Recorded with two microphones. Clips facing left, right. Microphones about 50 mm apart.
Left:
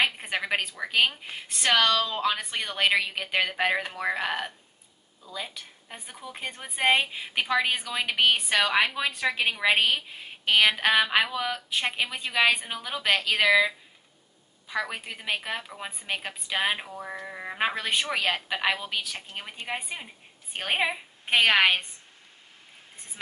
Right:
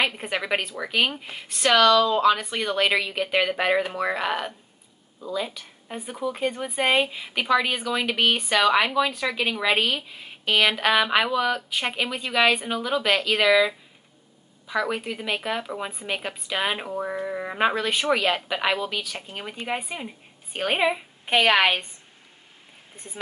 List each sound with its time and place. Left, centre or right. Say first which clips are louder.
0.0 s a woman's voice: right 1 dB; centre
1.8 s speech: right 7 dB; centre
2.2 s a woman's voice: right 7 dB; centre
5.9 s speech: right 13 dB; centre
6.2 s a woman's voice: right 11 dB; centre
14.7 s a woman's voice: right 5 dB; centre